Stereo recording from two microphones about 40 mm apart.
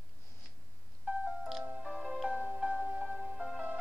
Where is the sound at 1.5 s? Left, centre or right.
Centre.